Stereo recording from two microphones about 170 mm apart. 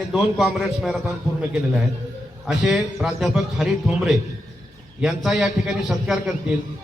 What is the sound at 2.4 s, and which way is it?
A man's voice, centre (ahead or behind).